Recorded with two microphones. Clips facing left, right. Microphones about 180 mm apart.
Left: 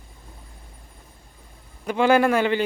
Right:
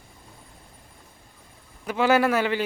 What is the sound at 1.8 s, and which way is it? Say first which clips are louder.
Speech: left 2 dB; 5° right (ahead or behind).